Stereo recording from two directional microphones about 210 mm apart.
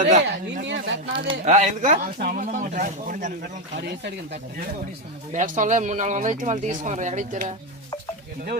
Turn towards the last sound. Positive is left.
turn(degrees=-35)  # may be behind; listen again after turning